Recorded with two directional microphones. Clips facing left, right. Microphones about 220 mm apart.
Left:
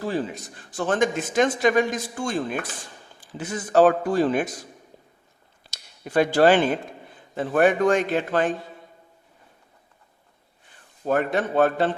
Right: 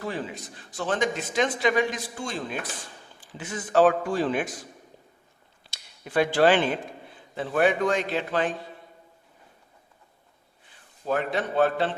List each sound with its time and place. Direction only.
0.0 s a man's voice: 35° left (ahead or behind)
0.7 s a man's voice: 50° left (ahead or behind)
5.7 s a man's voice: 45° left (ahead or behind)
11.0 s a man's voice: 50° left (ahead or behind)